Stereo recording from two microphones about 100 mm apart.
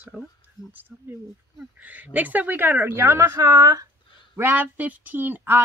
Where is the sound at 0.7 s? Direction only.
20° right (ahead or behind); by 3.9 s 40° right (ahead or behind).